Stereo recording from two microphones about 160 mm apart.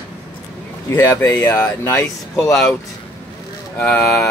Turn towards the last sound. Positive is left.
turn(degrees=10)  # may be behind; listen again after turning